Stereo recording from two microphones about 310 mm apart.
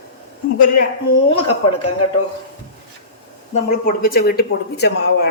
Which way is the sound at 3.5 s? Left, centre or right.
Left.